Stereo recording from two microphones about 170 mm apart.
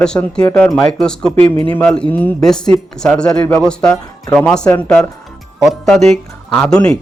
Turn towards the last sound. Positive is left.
turn(degrees=5)  # may be behind; listen again after turning